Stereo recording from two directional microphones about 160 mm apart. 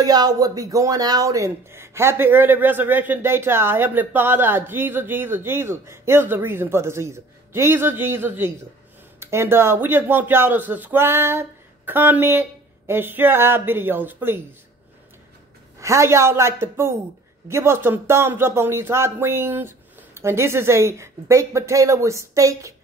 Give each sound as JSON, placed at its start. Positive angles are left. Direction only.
{"t": 0.0, "sound": "speech", "side_deg": -25}
{"t": 15.8, "sound": "speech", "side_deg": -20}